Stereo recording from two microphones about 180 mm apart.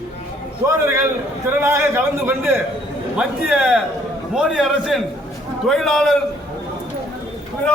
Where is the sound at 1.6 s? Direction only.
15° right (ahead or behind).